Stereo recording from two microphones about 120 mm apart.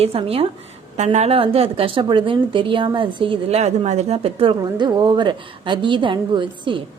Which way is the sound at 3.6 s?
70° right (ahead or behind).